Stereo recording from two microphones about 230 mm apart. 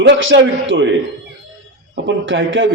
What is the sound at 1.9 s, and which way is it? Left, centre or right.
Speech, right.